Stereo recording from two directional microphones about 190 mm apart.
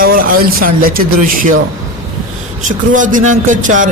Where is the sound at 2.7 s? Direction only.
45° right (ahead or behind).